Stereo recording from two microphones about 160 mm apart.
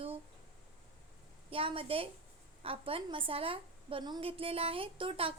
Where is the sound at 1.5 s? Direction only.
35° right (ahead or behind).